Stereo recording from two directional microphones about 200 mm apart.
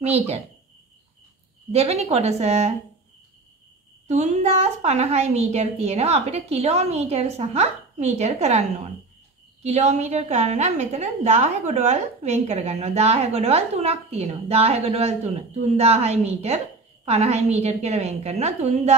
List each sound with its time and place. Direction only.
0.0 s a woman's voice: 30° right (ahead or behind)
1.7 s a woman's voice: 30° right (ahead or behind)
4.1 s a woman's voice: 35° right (ahead or behind)